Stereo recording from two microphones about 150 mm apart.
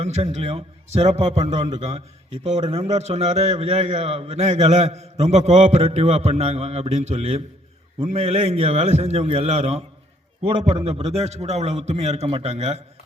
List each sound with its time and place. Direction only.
0.0 s a man's voice: 45° right (ahead or behind)
10.8 s a man's voice: 45° right (ahead or behind)